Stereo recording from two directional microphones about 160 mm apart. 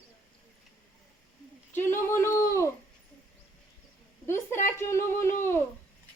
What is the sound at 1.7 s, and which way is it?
Speech, 15° left (ahead or behind).